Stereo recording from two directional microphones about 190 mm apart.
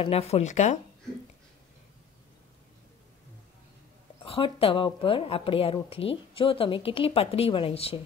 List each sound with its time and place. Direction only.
0.0 s speech: 30° left (ahead or behind)
4.2 s speech: 30° left (ahead or behind)